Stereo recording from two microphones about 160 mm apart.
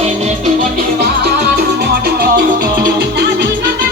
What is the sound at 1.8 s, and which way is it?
Music, 75° right (ahead or behind).